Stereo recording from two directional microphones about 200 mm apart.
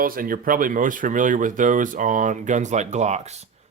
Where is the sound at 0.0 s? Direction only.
45° right (ahead or behind).